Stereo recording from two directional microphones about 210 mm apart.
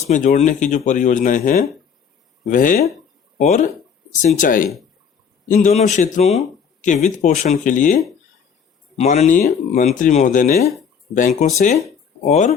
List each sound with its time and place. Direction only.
0.1 s speech: 35° left (ahead or behind)
9.0 s speech: 35° left (ahead or behind)